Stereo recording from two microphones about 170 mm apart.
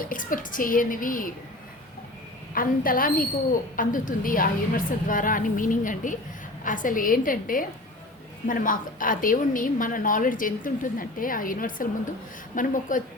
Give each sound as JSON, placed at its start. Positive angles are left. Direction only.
{"t": 0.0, "sound": "a woman's voice", "side_deg": 55}
{"t": 2.6, "sound": "a woman's voice", "side_deg": 55}